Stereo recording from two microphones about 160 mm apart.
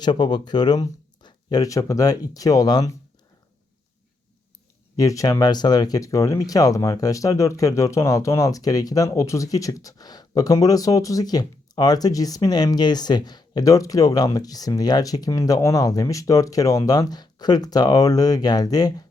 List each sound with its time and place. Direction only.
0.0 s speech: 25° left (ahead or behind)
4.9 s speech: 20° left (ahead or behind)